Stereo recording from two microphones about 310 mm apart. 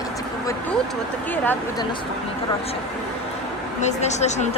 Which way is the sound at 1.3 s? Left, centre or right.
Centre.